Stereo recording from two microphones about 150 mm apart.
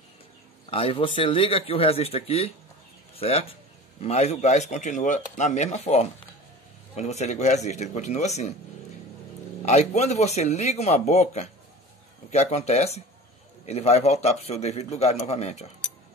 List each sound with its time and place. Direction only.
0.7 s speech: 40° left (ahead or behind)
9.7 s speech: 45° left (ahead or behind)